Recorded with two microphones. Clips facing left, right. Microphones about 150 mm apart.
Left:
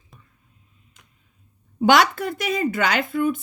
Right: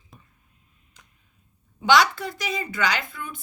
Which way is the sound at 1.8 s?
55° left (ahead or behind).